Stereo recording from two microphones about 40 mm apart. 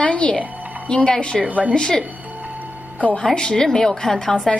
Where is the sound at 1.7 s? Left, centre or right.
Left.